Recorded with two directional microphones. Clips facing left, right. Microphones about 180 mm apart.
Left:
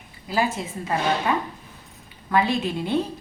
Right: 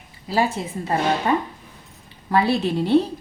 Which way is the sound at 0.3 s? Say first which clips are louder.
Right 2 dB; 30° right (ahead or behind).